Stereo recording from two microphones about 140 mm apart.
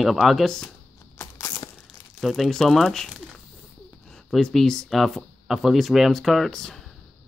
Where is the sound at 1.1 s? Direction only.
20° left (ahead or behind).